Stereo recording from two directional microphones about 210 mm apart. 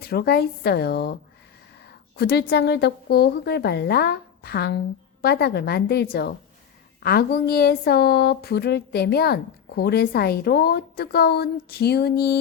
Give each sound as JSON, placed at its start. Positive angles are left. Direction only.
{"t": 0.0, "sound": "speech", "side_deg": 45}
{"t": 2.1, "sound": "speech", "side_deg": 50}